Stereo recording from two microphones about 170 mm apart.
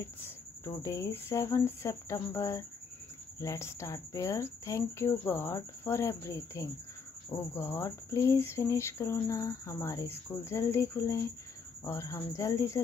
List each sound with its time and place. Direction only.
0.8 s speech: 15° left (ahead or behind)